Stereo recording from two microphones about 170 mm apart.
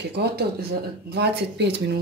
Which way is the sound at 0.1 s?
70° right (ahead or behind).